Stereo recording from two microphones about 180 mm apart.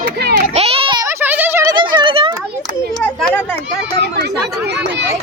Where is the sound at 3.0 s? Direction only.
5° left (ahead or behind).